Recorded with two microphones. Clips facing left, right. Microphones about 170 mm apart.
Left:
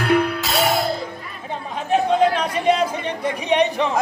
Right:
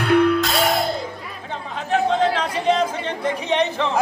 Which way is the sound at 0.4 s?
Centre (ahead or behind).